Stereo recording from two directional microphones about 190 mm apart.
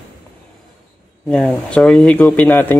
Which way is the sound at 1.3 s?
5° left (ahead or behind).